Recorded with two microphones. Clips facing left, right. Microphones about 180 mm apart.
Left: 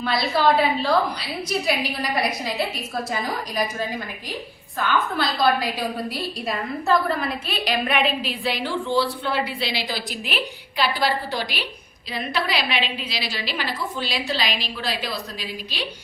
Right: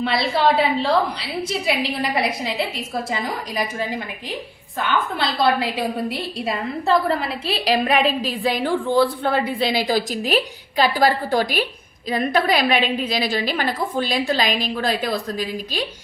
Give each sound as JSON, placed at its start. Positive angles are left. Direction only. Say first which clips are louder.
{"t": 0.0, "sound": "a woman's voice", "louder": "right 2 dB", "side_deg": -25}
{"t": 4.8, "sound": "a woman's voice", "louder": "right 1 dB", "side_deg": -25}